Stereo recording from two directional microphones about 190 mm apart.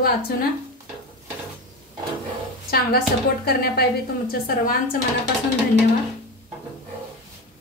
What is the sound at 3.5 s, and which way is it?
Speech, 55° left (ahead or behind).